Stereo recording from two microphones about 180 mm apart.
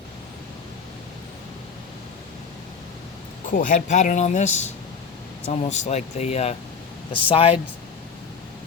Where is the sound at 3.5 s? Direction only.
45° left (ahead or behind); by 7.5 s 30° left (ahead or behind).